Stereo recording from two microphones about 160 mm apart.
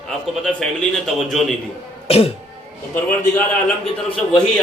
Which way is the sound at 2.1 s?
40° left (ahead or behind).